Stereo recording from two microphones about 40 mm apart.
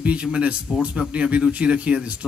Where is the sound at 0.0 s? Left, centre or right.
Right.